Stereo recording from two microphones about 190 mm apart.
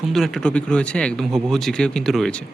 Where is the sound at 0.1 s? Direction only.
Centre (ahead or behind).